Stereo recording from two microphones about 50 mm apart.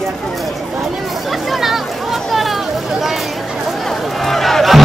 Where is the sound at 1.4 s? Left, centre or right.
Centre.